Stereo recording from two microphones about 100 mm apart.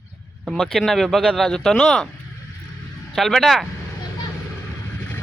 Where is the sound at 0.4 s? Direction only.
Centre (ahead or behind).